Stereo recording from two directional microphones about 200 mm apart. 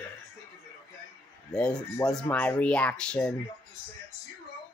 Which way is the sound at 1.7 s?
15° left (ahead or behind).